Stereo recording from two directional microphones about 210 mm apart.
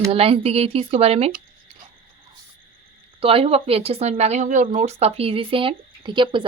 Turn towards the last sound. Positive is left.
turn(degrees=-20)  # may be behind; listen again after turning